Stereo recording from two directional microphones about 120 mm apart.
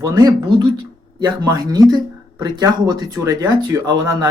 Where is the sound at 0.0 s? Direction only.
35° right (ahead or behind).